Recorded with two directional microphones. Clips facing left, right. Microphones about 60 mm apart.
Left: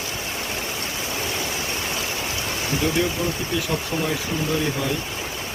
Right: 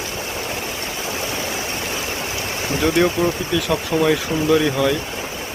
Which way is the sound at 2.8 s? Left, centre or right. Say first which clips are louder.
Right 6 dB; right.